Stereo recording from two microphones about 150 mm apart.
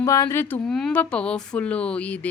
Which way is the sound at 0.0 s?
20° left (ahead or behind).